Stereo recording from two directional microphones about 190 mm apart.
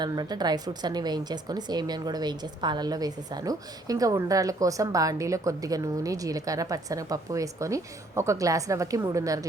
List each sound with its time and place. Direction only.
0.0 s a woman's voice: 20° right (ahead or behind)